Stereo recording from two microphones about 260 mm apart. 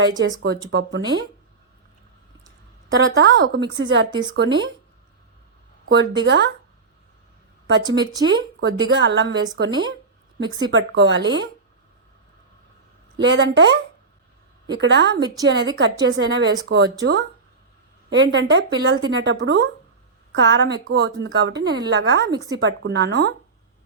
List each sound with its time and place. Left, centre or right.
0.2 s a woman's voice: right
3.2 s a woman's voice: right
5.9 s a woman's voice: right
7.9 s speech: centre
8.2 s a woman's voice: right
13.1 s a woman's voice: right